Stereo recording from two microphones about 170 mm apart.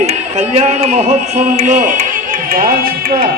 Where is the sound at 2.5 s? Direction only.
60° right (ahead or behind).